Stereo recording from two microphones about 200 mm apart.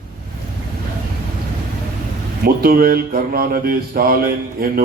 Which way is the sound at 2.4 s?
50° right (ahead or behind).